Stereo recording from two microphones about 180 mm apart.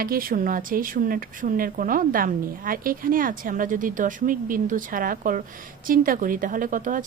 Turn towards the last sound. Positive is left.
turn(degrees=-45)  # may be behind; listen again after turning